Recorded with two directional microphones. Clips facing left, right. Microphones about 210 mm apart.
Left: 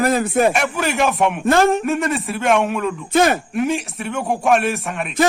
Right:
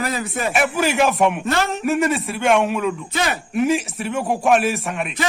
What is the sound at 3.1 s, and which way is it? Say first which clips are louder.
Speech: left 8 dB; 50° left (ahead or behind).